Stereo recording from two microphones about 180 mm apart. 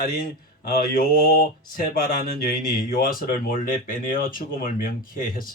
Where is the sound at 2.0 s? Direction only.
55° left (ahead or behind).